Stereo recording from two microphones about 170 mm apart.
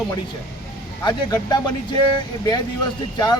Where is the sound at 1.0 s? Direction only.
25° left (ahead or behind).